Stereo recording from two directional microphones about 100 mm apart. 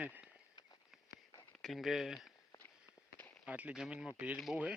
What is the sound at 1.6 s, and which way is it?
Speech, centre (ahead or behind).